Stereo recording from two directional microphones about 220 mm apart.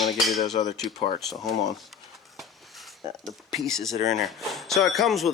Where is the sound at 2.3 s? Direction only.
Centre (ahead or behind).